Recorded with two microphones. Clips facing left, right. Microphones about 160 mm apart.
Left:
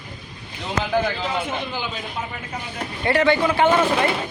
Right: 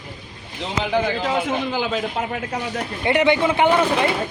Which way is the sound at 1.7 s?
90° right.